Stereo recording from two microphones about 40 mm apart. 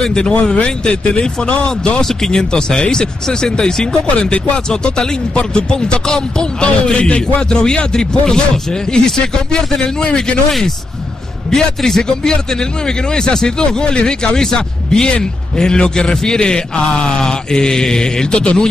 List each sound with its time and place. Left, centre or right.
0.0 s speech: centre
2.0 s speech: centre
9.5 s a man's voice: centre
9.8 s speech: left
11.5 s a man's voice: centre